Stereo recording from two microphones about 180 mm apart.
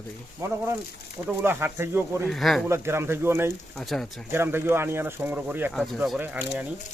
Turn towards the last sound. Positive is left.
turn(degrees=-10)  # may be behind; listen again after turning